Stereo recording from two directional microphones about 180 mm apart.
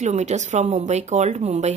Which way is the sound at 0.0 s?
40° right (ahead or behind).